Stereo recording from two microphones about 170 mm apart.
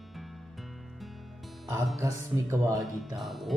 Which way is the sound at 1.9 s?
20° right (ahead or behind).